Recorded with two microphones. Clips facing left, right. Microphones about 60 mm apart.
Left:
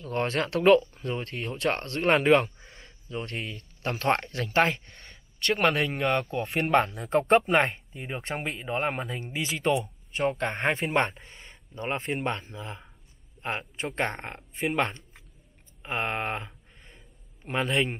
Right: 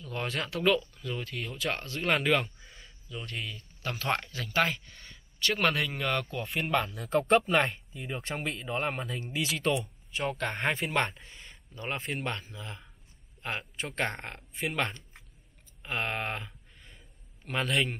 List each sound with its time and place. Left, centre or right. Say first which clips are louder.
0.0 s speech: left 6 dB; left
0.6 s speech: left 8 dB; left
2.1 s speech: left 7 dB; left
3.1 s speech: left 4 dB; left
4.3 s speech: left 4 dB; left
4.7 s speech: left 1 dB; left
5.0 s a sound: left 3 dB; centre
5.8 s speech: left 5 dB; left
6.5 s speech: left 6 dB; left
7.0 s speech: left 3 dB; left
10.1 s speech: left 4 dB; left
15.8 s a sound: left 3 dB; left
17.5 s speech: left 3 dB; left